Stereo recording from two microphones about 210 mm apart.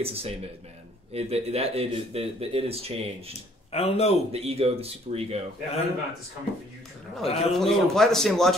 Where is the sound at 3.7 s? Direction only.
30° left (ahead or behind).